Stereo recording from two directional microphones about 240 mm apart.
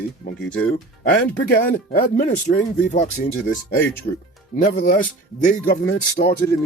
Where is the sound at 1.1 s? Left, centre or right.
Left.